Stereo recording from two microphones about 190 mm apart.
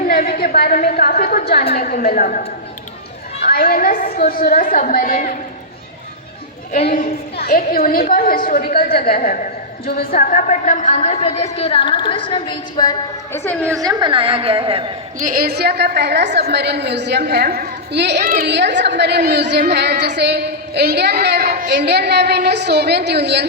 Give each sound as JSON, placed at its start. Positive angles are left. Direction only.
{"t": 0.1, "sound": "a sound", "side_deg": 50}
{"t": 0.5, "sound": "a woman's voice", "side_deg": 50}
{"t": 3.5, "sound": "a woman's voice", "side_deg": 50}
{"t": 6.8, "sound": "a woman's voice", "side_deg": 45}
{"t": 13.7, "sound": "a woman's voice", "side_deg": -20}
{"t": 15.2, "sound": "a woman's voice", "side_deg": -50}